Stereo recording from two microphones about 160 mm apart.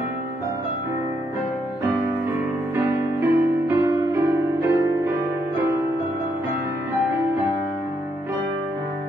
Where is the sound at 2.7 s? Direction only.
15° right (ahead or behind).